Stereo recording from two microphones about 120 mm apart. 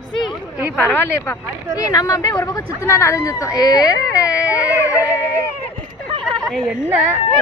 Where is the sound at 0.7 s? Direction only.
15° left (ahead or behind).